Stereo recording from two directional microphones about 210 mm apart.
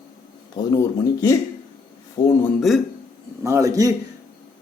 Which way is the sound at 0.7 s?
15° left (ahead or behind).